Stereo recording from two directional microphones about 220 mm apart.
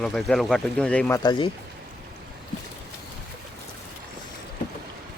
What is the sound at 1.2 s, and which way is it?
Speech, 20° left (ahead or behind).